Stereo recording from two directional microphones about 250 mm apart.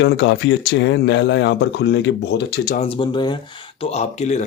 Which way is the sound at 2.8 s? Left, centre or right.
Left.